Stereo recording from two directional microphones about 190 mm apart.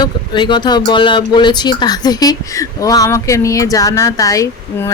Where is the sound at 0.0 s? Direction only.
25° left (ahead or behind).